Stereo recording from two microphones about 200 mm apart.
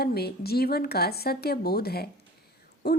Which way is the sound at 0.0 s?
50° left (ahead or behind).